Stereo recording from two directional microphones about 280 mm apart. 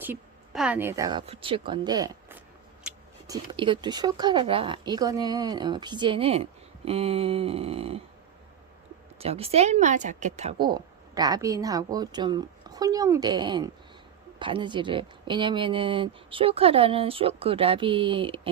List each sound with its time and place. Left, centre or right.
0.0 s a woman's voice: centre; by 8.0 s right
9.1 s speech: right